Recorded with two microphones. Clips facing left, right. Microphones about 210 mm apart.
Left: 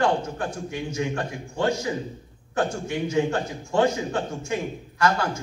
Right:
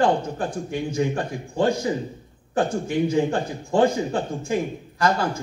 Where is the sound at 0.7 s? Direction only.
35° right (ahead or behind).